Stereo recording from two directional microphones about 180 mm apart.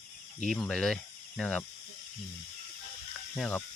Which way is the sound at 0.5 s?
Centre (ahead or behind).